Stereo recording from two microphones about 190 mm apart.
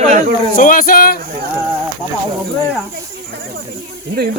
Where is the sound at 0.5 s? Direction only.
45° left (ahead or behind).